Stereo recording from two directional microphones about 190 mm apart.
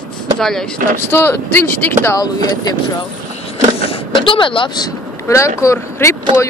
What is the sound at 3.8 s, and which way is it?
Vehicle, 30° left (ahead or behind).